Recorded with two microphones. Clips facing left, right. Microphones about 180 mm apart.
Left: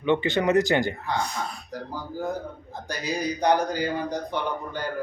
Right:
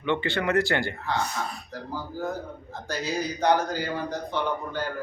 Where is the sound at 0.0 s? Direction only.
15° left (ahead or behind).